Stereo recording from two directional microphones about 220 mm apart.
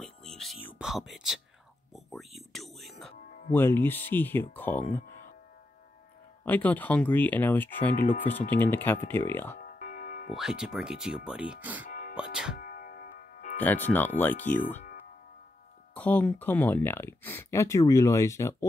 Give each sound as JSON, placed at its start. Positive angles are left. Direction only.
{"t": 0.0, "sound": "a sound", "side_deg": 0}
{"t": 2.0, "sound": "music", "side_deg": 0}
{"t": 3.3, "sound": "music", "side_deg": 40}
{"t": 3.5, "sound": "speech", "side_deg": 10}
{"t": 6.4, "sound": "speech", "side_deg": 10}
{"t": 9.6, "sound": "tick-tock", "side_deg": 40}
{"t": 10.3, "sound": "speech", "side_deg": 0}
{"t": 11.8, "sound": "music", "side_deg": 40}
{"t": 12.2, "sound": "music", "side_deg": -5}
{"t": 12.5, "sound": "music", "side_deg": 40}
{"t": 13.6, "sound": "speech", "side_deg": 10}
{"t": 15.9, "sound": "speech", "side_deg": 5}